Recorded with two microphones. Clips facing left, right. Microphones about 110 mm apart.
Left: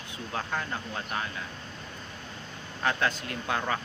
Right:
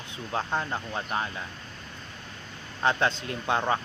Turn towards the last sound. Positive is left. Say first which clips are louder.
# right 4 dB
turn(degrees=-25)  # may be behind; listen again after turning